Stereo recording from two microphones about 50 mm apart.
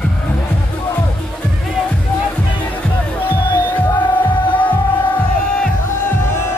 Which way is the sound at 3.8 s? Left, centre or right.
Left.